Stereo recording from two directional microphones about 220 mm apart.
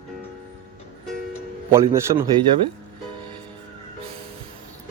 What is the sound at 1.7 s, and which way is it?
Speech, 15° right (ahead or behind).